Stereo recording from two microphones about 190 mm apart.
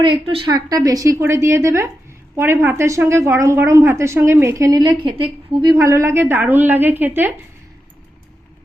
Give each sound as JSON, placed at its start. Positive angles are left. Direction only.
{"t": 0.0, "sound": "a woman's voice", "side_deg": -25}